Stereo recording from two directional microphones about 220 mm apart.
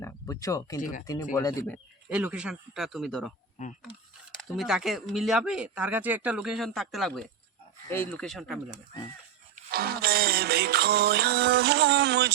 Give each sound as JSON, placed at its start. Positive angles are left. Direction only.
{"t": 0.0, "sound": "speech", "side_deg": 15}
{"t": 0.8, "sound": "speech", "side_deg": 35}
{"t": 1.0, "sound": "speech", "side_deg": 15}
{"t": 2.0, "sound": "speech", "side_deg": -5}
{"t": 4.4, "sound": "speech", "side_deg": 0}
{"t": 9.7, "sound": "music", "side_deg": -45}